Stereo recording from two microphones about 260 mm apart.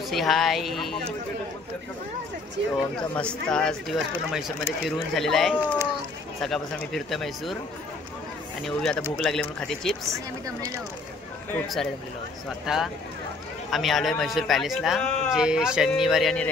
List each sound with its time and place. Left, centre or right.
0.1 s a man's voice: centre
3.2 s a man's voice: centre
8.6 s a man's voice: centre
10.0 s speech: centre
11.5 s a man's voice: centre